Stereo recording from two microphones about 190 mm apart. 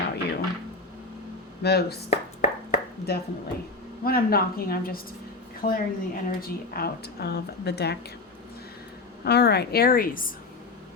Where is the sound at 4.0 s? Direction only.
50° left (ahead or behind).